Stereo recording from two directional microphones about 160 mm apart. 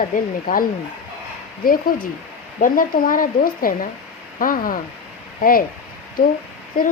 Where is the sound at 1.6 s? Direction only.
60° left (ahead or behind).